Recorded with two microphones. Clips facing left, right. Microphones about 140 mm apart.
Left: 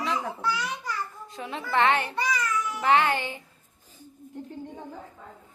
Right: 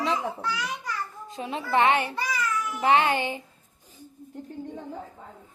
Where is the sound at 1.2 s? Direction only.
20° right (ahead or behind).